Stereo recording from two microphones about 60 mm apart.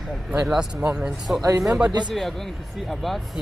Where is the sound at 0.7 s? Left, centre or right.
Right.